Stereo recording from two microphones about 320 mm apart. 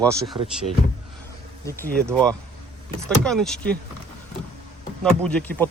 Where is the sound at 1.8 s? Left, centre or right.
Centre.